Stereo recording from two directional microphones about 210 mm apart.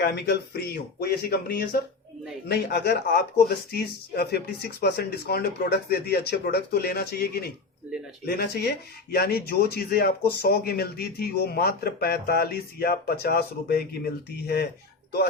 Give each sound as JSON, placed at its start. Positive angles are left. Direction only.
{"t": 0.0, "sound": "speech", "side_deg": 50}